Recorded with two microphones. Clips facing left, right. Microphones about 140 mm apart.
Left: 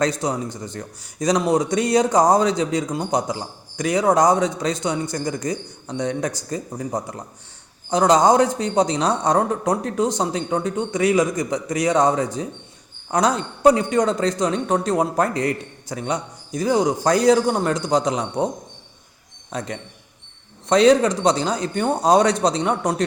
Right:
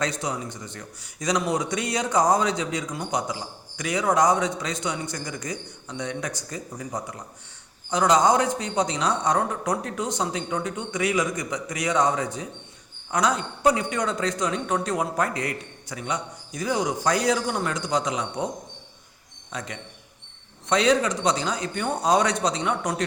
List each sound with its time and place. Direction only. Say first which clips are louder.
0.0 s a man's voice: left 6 dB; 40° left (ahead or behind)
19.5 s a man's voice: left 6 dB; 40° left (ahead or behind)